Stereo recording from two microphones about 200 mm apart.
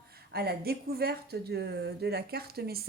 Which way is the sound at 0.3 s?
50° right (ahead or behind).